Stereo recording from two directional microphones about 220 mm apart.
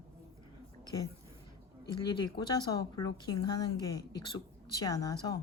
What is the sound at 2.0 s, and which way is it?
A woman's voice, 20° left (ahead or behind).